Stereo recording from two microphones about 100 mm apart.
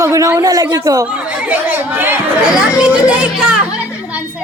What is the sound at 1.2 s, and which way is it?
Chatter, 15° right (ahead or behind).